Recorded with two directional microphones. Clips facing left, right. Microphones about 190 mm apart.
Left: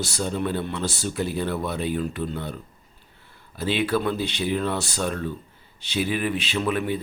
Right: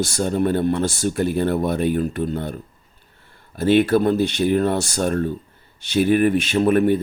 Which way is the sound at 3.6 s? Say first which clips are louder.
Right 8 dB; 50° right (ahead or behind).